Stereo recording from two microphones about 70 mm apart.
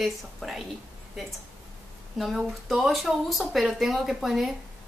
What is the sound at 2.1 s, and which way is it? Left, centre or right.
A woman's voice, centre.